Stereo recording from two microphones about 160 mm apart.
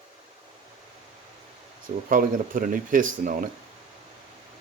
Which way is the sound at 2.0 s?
60° right (ahead or behind).